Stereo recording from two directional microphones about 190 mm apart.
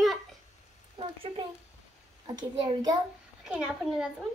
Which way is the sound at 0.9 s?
30° right (ahead or behind).